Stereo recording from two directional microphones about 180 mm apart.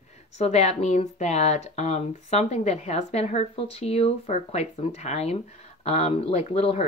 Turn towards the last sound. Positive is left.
turn(degrees=35)  # may be behind; listen again after turning